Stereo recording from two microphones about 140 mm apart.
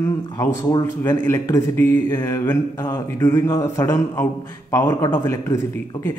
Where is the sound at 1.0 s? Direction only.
20° left (ahead or behind).